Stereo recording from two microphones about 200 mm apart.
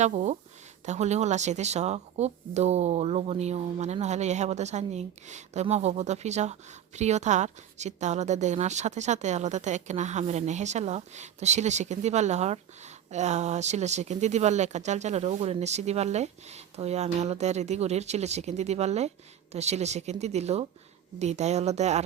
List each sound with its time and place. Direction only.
0.0 s speech: 35° right (ahead or behind)